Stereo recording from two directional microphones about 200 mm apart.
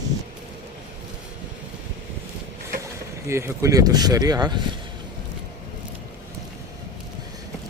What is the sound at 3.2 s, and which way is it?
Speech, 15° right (ahead or behind).